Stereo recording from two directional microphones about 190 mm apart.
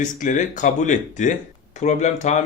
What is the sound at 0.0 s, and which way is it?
Speech, 40° left (ahead or behind).